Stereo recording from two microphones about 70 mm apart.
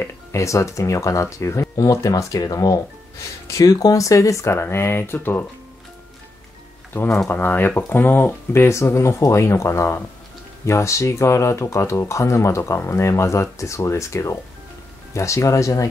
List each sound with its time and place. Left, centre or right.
0.0 s speech: left
6.9 s speech: left
8.6 s speech: left